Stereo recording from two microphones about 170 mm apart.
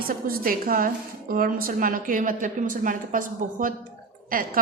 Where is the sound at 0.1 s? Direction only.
55° right (ahead or behind).